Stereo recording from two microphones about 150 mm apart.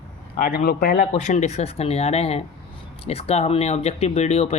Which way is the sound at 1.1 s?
50° left (ahead or behind).